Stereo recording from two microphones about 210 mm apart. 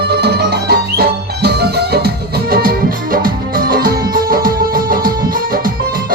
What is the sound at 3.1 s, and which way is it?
Music, 45° right (ahead or behind).